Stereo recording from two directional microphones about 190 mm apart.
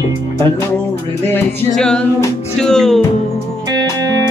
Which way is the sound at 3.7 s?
20° right (ahead or behind).